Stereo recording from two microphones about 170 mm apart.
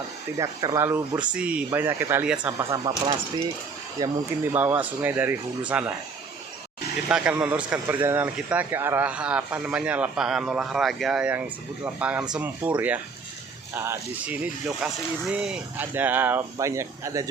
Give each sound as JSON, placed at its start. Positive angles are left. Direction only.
{"t": 0.3, "sound": "speech", "side_deg": -20}
{"t": 2.6, "sound": "speech", "side_deg": -20}
{"t": 7.1, "sound": "speech", "side_deg": -5}